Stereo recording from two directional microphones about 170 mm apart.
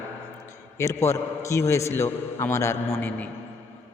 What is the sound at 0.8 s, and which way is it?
A man's voice, 15° left (ahead or behind).